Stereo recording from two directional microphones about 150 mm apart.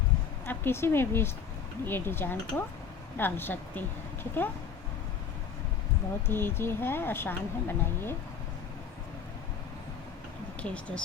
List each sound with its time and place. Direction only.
0.4 s a woman's voice: 15° left (ahead or behind)
6.2 s speech: 15° left (ahead or behind)
10.6 s speech: 10° left (ahead or behind)